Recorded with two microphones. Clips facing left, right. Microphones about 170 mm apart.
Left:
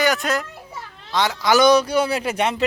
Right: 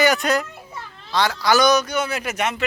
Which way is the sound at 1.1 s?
20° left (ahead or behind).